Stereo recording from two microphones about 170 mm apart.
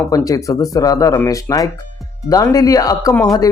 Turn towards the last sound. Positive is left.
turn(degrees=20)  # may be behind; listen again after turning